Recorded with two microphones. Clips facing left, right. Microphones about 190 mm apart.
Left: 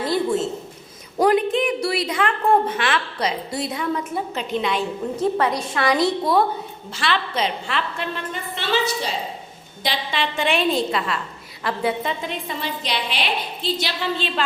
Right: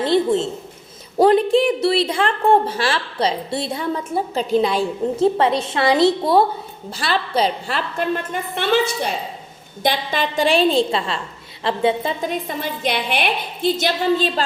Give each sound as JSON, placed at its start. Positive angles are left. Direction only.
{"t": 0.0, "sound": "a sound", "side_deg": -25}
{"t": 1.2, "sound": "a woman's voice", "side_deg": -30}
{"t": 12.2, "sound": "a woman's voice", "side_deg": -45}